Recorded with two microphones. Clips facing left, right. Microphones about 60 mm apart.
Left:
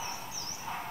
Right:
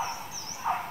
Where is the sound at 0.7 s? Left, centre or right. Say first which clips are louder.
Right 10 dB; right.